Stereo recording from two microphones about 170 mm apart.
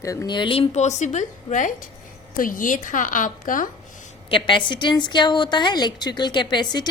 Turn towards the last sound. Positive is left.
turn(degrees=25)  # may be behind; listen again after turning